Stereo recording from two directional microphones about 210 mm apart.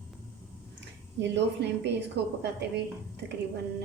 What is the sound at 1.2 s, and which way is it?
A woman's voice, 55° right (ahead or behind).